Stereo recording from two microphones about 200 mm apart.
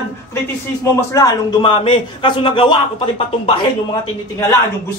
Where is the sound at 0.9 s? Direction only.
15° left (ahead or behind).